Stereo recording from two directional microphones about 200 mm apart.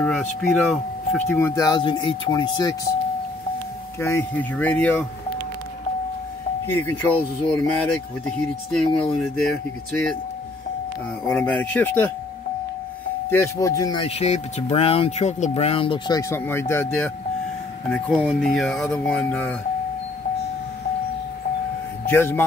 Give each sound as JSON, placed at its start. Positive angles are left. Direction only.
{"t": 0.0, "sound": "speech", "side_deg": 0}
{"t": 4.0, "sound": "speech", "side_deg": 10}
{"t": 6.7, "sound": "speech", "side_deg": 10}
{"t": 9.0, "sound": "speech", "side_deg": 5}
{"t": 11.2, "sound": "speech", "side_deg": 5}
{"t": 13.3, "sound": "speech", "side_deg": 15}
{"t": 22.0, "sound": "speech", "side_deg": 10}